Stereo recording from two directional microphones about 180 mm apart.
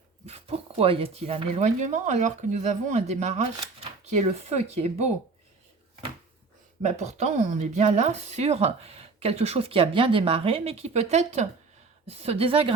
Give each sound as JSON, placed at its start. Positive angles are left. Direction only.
{"t": 0.3, "sound": "speech", "side_deg": -35}
{"t": 6.8, "sound": "speech", "side_deg": -40}